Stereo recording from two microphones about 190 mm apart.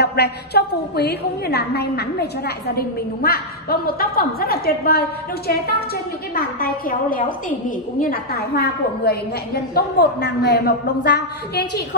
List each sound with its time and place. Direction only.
0.0 s a woman's voice: 60° left (ahead or behind)
6.3 s a woman's voice: 50° left (ahead or behind)